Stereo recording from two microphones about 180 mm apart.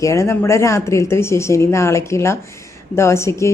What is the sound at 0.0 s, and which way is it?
Speech, 15° left (ahead or behind).